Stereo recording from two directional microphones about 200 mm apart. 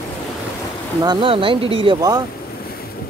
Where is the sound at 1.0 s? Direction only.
25° right (ahead or behind).